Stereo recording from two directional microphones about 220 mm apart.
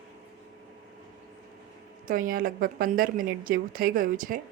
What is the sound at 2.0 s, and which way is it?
A woman's voice, 40° right (ahead or behind).